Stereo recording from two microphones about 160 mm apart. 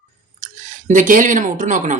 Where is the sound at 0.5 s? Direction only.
50° right (ahead or behind).